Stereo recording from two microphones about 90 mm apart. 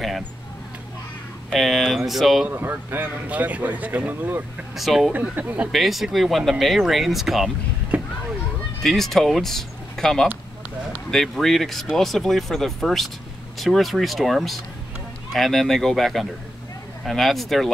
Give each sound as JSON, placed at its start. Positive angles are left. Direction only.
{"t": 1.5, "sound": "speech", "side_deg": 0}
{"t": 2.4, "sound": "speech", "side_deg": -20}
{"t": 4.7, "sound": "speech", "side_deg": -5}
{"t": 5.3, "sound": "speech", "side_deg": -15}
{"t": 5.7, "sound": "speech", "side_deg": 0}
{"t": 7.9, "sound": "a sound", "side_deg": -15}
{"t": 8.8, "sound": "speech", "side_deg": 5}